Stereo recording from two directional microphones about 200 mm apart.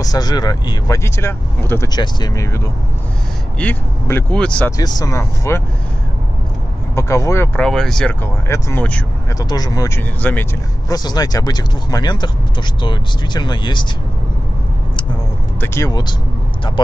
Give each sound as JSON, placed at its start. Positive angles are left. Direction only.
{"t": 0.0, "sound": "speech", "side_deg": 20}
{"t": 4.7, "sound": "speech", "side_deg": 20}
{"t": 7.0, "sound": "speech", "side_deg": 15}
{"t": 9.4, "sound": "speech", "side_deg": 20}
{"t": 15.6, "sound": "speech", "side_deg": 15}